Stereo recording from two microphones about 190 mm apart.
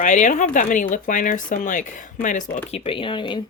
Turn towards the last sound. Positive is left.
turn(degrees=25)  # may be behind; listen again after turning